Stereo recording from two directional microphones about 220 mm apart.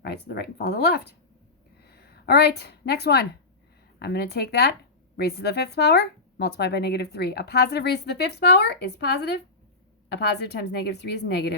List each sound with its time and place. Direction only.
0.0 s a woman's voice: 50° left (ahead or behind)